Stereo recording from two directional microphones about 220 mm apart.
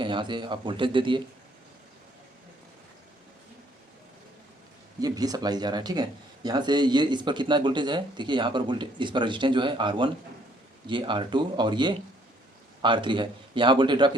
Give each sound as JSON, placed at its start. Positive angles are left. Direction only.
{"t": 0.0, "sound": "speech", "side_deg": -20}
{"t": 4.9, "sound": "speech", "side_deg": -15}